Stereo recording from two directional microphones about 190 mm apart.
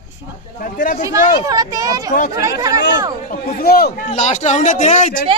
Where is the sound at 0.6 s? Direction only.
45° left (ahead or behind).